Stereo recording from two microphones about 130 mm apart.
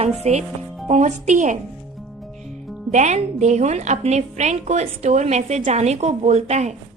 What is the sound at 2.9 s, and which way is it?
A woman's voice, 65° right (ahead or behind).